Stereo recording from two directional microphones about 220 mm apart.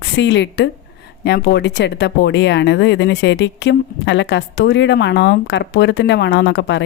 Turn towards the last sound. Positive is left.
turn(degrees=55)  # may be behind; listen again after turning